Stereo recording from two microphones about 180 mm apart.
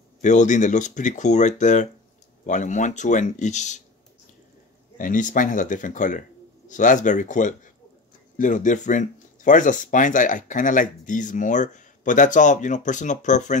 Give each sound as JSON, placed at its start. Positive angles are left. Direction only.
{"t": 0.2, "sound": "speech", "side_deg": 40}
{"t": 4.9, "sound": "speech", "side_deg": 45}